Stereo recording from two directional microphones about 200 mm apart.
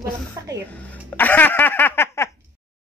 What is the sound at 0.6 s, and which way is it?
Speech, 10° left (ahead or behind).